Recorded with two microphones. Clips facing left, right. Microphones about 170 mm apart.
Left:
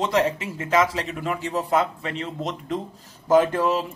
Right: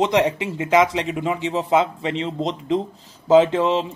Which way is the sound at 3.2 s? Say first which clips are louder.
Right 4 dB; 20° right (ahead or behind).